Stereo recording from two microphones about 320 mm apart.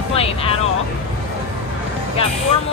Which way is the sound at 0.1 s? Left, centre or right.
Centre.